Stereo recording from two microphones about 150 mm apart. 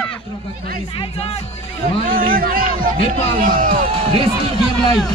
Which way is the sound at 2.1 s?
70° right (ahead or behind).